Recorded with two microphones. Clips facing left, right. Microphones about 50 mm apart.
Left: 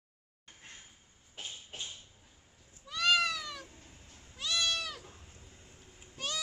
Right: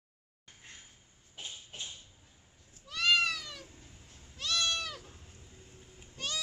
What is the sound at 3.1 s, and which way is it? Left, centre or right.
Cat, centre.